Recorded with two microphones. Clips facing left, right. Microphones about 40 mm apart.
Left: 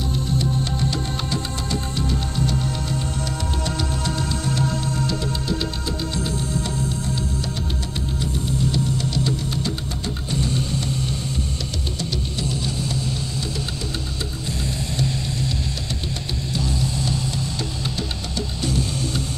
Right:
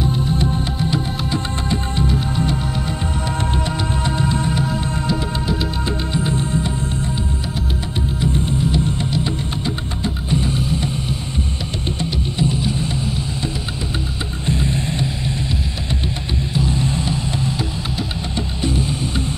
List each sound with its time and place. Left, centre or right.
0.0 s music: right
8.3 s music: right; by 10.9 s centre
12.0 s music: right
14.4 s music: right
16.5 s music: right